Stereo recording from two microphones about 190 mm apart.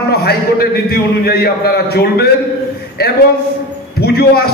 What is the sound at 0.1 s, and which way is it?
A man's voice, 55° left (ahead or behind).